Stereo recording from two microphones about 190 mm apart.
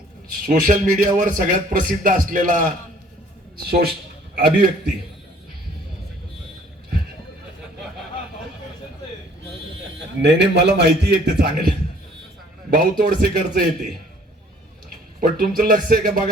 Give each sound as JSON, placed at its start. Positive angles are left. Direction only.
{"t": 0.4, "sound": "a man's voice", "side_deg": -45}
{"t": 4.4, "sound": "a man's voice", "side_deg": -55}
{"t": 10.2, "sound": "a man's voice", "side_deg": -65}
{"t": 12.7, "sound": "a man's voice", "side_deg": -50}
{"t": 15.2, "sound": "a man's voice", "side_deg": -50}